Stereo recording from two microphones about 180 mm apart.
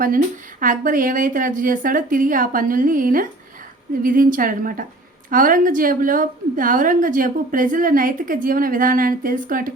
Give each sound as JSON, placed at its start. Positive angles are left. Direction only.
{"t": 0.6, "sound": "a woman's voice", "side_deg": -50}